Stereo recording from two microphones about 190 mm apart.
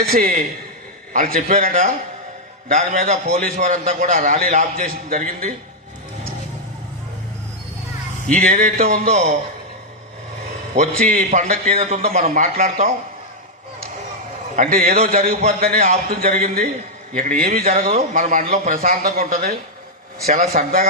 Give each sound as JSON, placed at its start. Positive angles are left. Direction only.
{"t": 0.1, "sound": "a man's voice", "side_deg": -50}
{"t": 8.3, "sound": "a man's voice", "side_deg": -45}
{"t": 10.8, "sound": "a man's voice", "side_deg": -40}
{"t": 11.8, "sound": "a man's voice", "side_deg": -35}
{"t": 14.5, "sound": "a man's voice", "side_deg": -40}